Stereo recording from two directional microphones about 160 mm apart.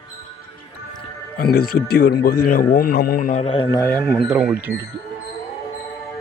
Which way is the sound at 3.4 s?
35° left (ahead or behind).